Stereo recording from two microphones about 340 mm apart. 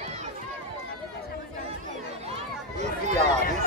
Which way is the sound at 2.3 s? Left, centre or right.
Centre.